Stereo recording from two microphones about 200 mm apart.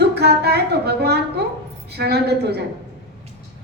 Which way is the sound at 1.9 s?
55° right (ahead or behind).